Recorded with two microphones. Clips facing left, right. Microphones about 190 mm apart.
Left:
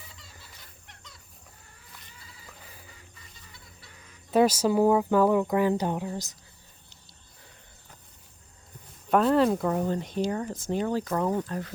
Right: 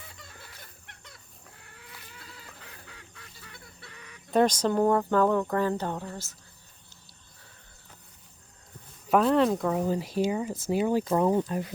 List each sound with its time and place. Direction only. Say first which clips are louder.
0.2 s chicken: right 4 dB; 50° right (ahead or behind)
0.9 s a sound: right 1 dB; 60° right (ahead or behind)
1.6 s goose: right 6 dB; 70° right (ahead or behind)
4.3 s speech: left 1 dB; 5° left (ahead or behind)
9.0 s speech: even; centre (ahead or behind)